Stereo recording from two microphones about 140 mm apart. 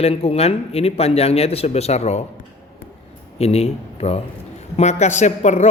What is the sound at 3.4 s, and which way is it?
A man's voice, 45° left (ahead or behind).